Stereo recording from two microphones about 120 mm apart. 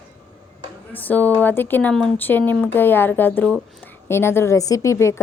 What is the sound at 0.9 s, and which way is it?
A woman's voice, 15° left (ahead or behind).